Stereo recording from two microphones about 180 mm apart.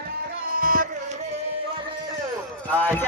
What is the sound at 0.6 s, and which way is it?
Music, 50° right (ahead or behind).